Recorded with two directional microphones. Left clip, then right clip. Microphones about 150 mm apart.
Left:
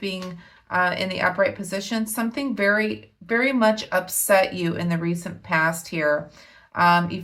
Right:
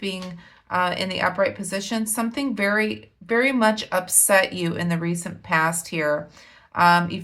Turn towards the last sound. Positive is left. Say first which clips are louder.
# right 1 dB
turn(degrees=-20)  # may be behind; listen again after turning